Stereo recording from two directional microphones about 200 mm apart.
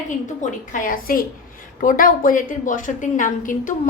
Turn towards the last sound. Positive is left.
turn(degrees=40)  # may be behind; listen again after turning